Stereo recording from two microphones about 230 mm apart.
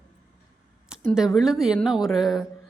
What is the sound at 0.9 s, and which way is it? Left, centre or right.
A woman's voice, centre.